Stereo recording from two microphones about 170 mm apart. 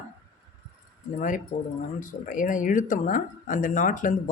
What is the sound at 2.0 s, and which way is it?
Speech, 50° left (ahead or behind).